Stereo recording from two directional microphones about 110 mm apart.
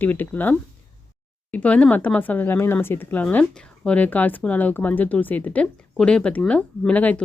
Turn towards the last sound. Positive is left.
turn(degrees=15)  # may be behind; listen again after turning